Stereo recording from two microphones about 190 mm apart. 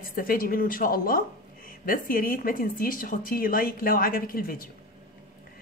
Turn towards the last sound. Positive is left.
turn(degrees=50)  # may be behind; listen again after turning